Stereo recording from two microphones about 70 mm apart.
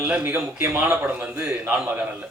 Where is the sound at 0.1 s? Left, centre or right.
Centre.